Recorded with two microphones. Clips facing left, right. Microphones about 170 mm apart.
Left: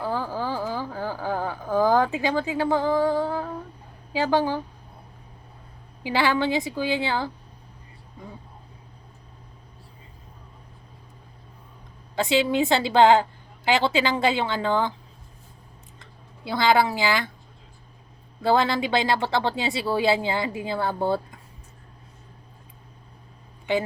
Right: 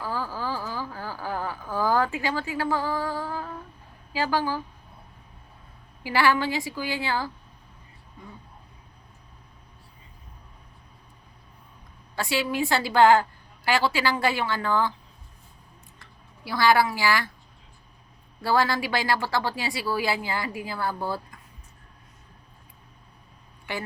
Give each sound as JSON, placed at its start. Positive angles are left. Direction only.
{"t": 0.0, "sound": "a sound", "side_deg": 20}
{"t": 4.1, "sound": "a woman's voice", "side_deg": 20}
{"t": 6.0, "sound": "a woman's voice", "side_deg": 20}
{"t": 12.1, "sound": "a woman's voice", "side_deg": 20}
{"t": 16.4, "sound": "a woman's voice", "side_deg": 20}
{"t": 18.4, "sound": "a woman's voice", "side_deg": 20}